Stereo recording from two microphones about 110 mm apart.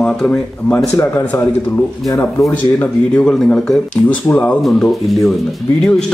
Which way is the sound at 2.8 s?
10° left (ahead or behind).